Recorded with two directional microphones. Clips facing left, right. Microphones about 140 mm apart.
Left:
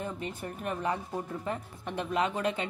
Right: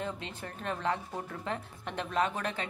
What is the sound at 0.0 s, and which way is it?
A woman's voice, 10° left (ahead or behind).